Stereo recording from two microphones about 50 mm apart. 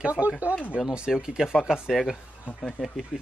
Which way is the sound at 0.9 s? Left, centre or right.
Centre.